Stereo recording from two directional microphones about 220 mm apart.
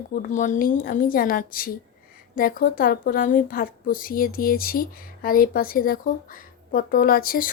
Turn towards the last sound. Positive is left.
turn(degrees=40)  # may be behind; listen again after turning